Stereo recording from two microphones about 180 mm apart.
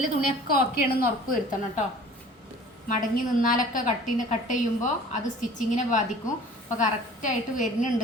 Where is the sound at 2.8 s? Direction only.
50° left (ahead or behind).